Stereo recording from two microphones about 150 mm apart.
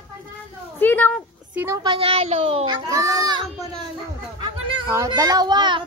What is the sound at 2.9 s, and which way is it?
Speech, 25° right (ahead or behind).